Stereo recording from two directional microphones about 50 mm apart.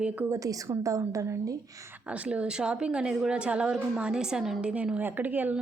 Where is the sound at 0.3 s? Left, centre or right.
Right.